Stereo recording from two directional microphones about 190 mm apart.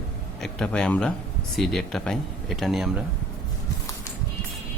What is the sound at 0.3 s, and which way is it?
Speech, centre (ahead or behind).